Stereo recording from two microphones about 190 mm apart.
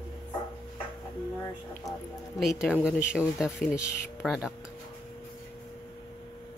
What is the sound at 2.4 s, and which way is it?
Speech, centre (ahead or behind).